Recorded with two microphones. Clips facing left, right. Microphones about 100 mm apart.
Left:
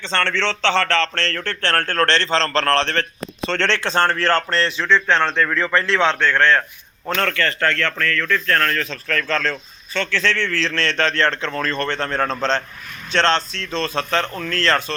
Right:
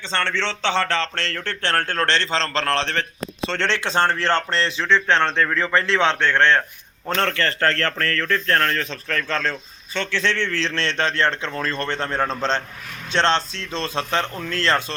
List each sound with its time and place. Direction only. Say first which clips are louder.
0.0 s a man's voice: left 3 dB; 10° right (ahead or behind)